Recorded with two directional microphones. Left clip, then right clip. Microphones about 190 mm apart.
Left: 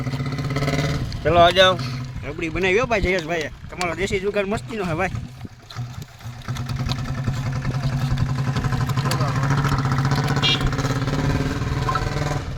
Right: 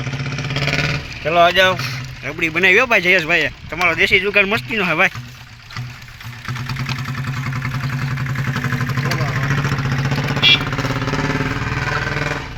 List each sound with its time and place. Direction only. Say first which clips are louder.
0.2 s vehicle: right 5 dB; 90° left
1.2 s speech: right 1 dB; 25° left (ahead or behind)
1.8 s speech: right 7 dB; centre (ahead or behind)
6.4 s vehicle: right 5 dB; 45° left (ahead or behind); by 11.7 s 25° left (ahead or behind)
11.9 s vehicle: right 5 dB; centre (ahead or behind)